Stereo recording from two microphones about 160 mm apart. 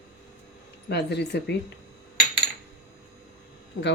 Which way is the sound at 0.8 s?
90° left.